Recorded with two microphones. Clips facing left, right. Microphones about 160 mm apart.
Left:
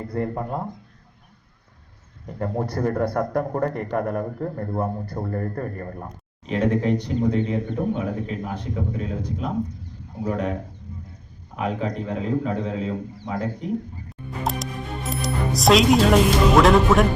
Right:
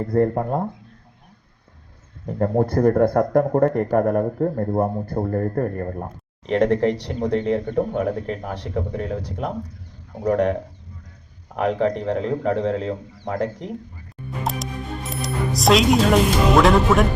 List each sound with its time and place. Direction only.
0.0 s speech: 50° right (ahead or behind)
2.4 s speech: 50° right (ahead or behind)
6.4 s speech: 70° right (ahead or behind)
14.3 s music: centre (ahead or behind)